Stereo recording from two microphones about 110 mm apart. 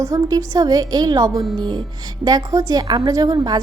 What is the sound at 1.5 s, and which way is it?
A woman's voice, 45° right (ahead or behind).